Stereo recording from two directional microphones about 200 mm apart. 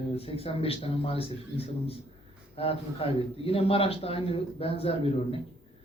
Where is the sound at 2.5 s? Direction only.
30° left (ahead or behind).